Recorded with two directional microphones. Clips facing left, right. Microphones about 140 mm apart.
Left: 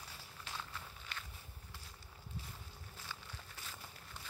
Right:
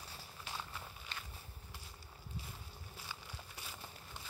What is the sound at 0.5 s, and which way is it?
Walk, 20° right (ahead or behind).